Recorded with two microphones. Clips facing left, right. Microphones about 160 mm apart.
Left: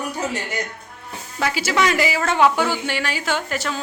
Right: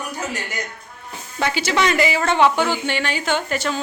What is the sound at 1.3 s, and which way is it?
Speech, 5° left (ahead or behind).